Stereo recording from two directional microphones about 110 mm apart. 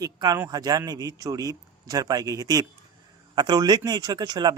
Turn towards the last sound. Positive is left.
turn(degrees=-40)  # may be behind; listen again after turning